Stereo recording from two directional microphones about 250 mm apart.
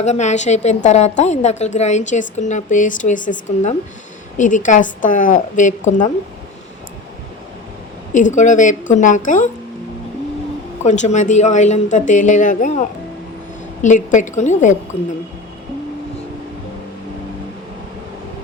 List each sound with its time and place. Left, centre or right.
0.0 s a woman's voice: left
8.1 s a woman's voice: left
10.8 s a woman's voice: left
13.8 s a woman's voice: left